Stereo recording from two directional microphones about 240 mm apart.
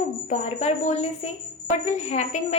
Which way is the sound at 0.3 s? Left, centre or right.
Left.